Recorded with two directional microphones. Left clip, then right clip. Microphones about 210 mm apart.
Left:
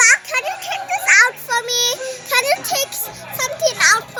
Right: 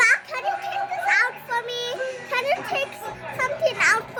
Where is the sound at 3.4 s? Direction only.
10° left (ahead or behind).